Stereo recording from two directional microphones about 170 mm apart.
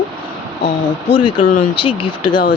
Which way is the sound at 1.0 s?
30° left (ahead or behind).